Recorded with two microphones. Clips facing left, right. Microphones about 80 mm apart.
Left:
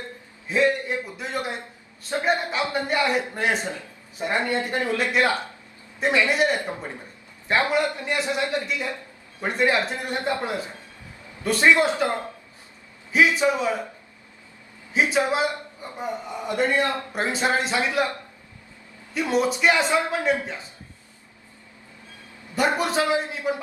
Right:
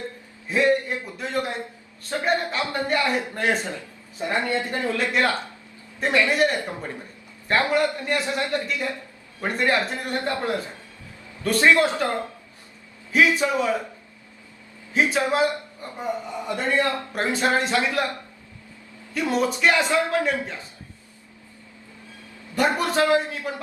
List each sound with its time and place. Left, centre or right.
1.2 s a man's voice: centre
13.1 s a man's voice: centre
14.9 s a man's voice: centre
19.1 s a man's voice: centre
22.5 s a man's voice: centre